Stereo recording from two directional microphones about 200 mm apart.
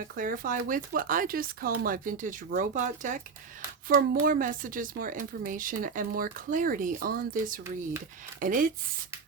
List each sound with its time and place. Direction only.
0.2 s speech: 45° right (ahead or behind)